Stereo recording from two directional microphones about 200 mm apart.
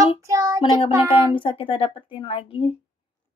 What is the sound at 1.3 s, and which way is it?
A woman's voice, 25° left (ahead or behind).